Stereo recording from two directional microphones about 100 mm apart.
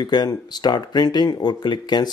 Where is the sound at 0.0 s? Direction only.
45° left (ahead or behind).